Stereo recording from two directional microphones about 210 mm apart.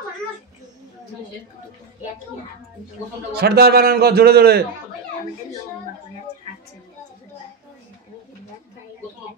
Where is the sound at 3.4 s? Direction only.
50° right (ahead or behind).